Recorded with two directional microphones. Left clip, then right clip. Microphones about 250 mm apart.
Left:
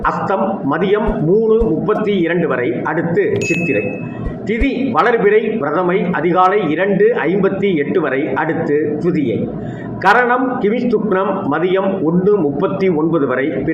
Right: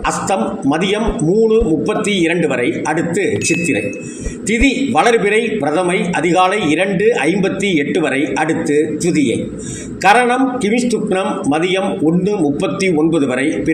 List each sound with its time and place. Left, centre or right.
4.9 s a man's voice: right
13.1 s a man's voice: right